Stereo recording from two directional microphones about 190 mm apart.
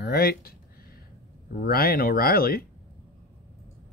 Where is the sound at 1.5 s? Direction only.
50° left (ahead or behind).